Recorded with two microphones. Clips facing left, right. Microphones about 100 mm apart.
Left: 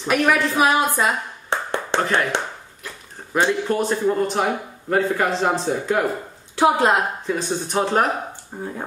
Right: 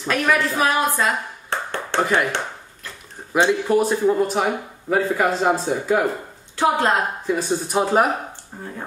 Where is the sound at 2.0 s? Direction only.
10° right (ahead or behind).